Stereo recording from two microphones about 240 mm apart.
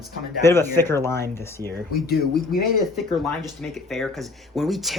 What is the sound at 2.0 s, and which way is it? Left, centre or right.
Speech, left.